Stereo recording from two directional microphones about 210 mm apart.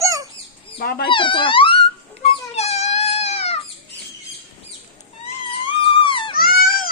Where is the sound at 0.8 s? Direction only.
45° left (ahead or behind).